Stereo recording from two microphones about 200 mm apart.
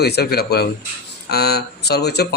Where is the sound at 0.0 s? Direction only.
55° left (ahead or behind).